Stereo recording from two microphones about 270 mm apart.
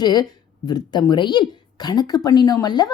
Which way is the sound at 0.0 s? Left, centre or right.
Centre.